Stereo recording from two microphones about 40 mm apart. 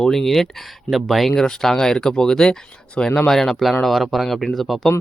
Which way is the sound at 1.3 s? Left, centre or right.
Centre.